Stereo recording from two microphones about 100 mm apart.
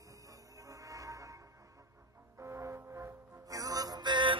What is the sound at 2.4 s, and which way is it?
Music, 25° right (ahead or behind).